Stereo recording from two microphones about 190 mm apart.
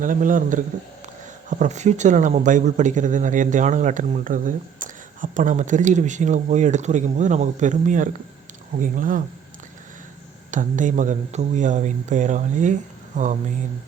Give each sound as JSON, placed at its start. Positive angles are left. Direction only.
{"t": 0.0, "sound": "a man's voice", "side_deg": -45}
{"t": 10.5, "sound": "speech", "side_deg": -40}